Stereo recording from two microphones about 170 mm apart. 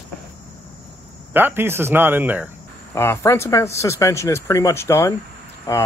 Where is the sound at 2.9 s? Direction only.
15° left (ahead or behind).